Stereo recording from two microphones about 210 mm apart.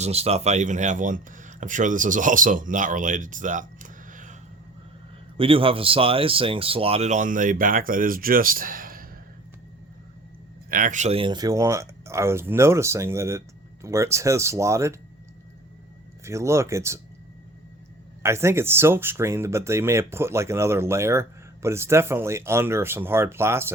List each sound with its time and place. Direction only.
0.0 s speech: 30° right (ahead or behind)
5.4 s speech: 25° right (ahead or behind); by 9.0 s 40° right (ahead or behind)
10.7 s speech: 40° right (ahead or behind); by 14.9 s 15° right (ahead or behind)
16.2 s speech: 15° right (ahead or behind)
18.2 s speech: 15° right (ahead or behind)